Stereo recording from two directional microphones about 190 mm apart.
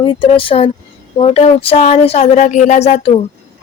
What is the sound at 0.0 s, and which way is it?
Speech, 25° left (ahead or behind).